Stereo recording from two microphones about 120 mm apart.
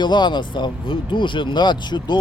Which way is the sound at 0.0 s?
40° left (ahead or behind).